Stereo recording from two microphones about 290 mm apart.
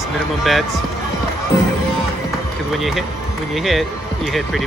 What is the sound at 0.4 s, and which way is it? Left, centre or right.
Speech, centre.